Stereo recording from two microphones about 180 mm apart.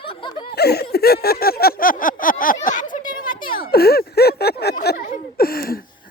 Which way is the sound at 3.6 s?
60° left (ahead or behind).